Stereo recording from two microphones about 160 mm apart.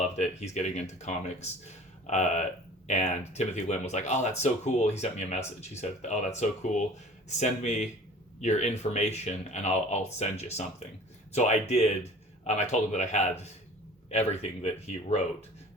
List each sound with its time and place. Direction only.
0.0 s speech: 45° left (ahead or behind)